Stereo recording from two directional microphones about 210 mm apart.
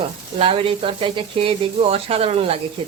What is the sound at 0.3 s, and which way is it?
Speech, 25° right (ahead or behind).